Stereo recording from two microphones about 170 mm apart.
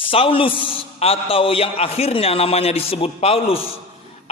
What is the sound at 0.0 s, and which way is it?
A man's voice, 30° left (ahead or behind).